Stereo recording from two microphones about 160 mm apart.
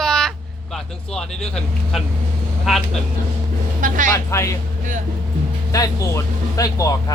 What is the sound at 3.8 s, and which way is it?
Speech, 55° right (ahead or behind).